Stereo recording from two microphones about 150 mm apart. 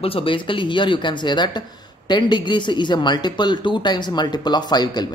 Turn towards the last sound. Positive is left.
turn(degrees=30)  # may be behind; listen again after turning